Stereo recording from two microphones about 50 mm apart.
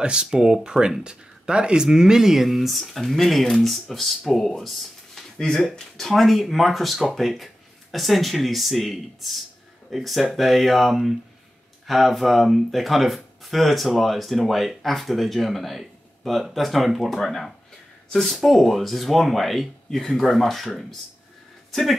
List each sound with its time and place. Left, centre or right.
0.0 s speech: centre